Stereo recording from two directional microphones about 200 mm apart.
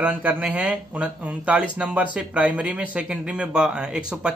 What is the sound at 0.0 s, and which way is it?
Speech, 10° right (ahead or behind).